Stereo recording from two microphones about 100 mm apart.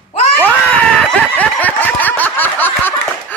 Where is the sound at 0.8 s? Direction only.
15° left (ahead or behind).